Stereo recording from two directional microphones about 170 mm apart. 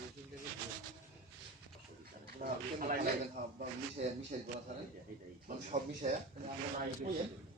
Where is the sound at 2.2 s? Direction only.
60° right (ahead or behind).